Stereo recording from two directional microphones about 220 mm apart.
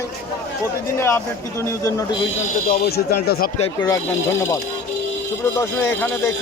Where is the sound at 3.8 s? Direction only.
15° left (ahead or behind).